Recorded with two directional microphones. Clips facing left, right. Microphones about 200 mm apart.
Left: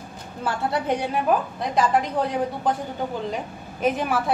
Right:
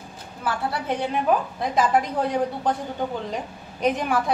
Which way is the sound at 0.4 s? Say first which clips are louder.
Left 2 dB; 20° left (ahead or behind).